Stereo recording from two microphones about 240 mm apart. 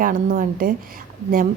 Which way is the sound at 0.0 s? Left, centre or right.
Right.